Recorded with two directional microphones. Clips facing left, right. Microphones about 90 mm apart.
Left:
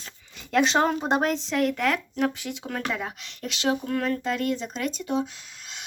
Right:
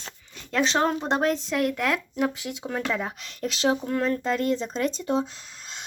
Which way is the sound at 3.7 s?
20° right (ahead or behind).